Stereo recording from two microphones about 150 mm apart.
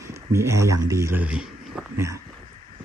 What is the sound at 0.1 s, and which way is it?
Speech, 20° right (ahead or behind).